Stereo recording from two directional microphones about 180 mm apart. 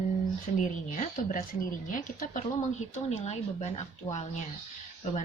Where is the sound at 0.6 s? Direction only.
45° left (ahead or behind).